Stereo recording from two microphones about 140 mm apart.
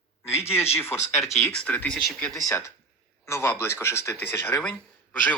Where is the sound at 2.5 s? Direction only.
20° left (ahead or behind).